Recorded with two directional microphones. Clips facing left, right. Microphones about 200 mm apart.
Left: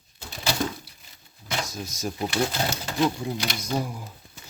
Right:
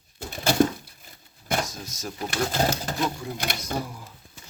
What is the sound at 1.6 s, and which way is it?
Speech, 10° left (ahead or behind).